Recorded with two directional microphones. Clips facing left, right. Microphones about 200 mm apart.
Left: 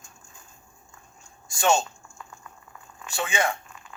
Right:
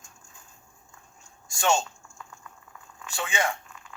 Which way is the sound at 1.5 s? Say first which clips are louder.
Left 2 dB; 20° left (ahead or behind).